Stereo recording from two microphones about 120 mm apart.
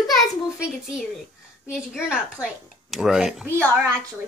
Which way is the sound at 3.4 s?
15° right (ahead or behind).